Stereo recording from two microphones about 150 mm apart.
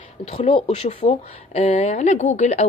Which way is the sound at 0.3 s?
40° left (ahead or behind).